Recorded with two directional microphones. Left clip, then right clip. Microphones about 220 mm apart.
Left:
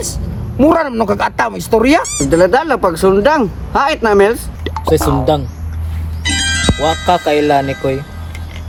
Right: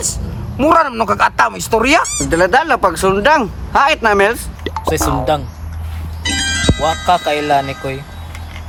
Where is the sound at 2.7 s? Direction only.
30° right (ahead or behind).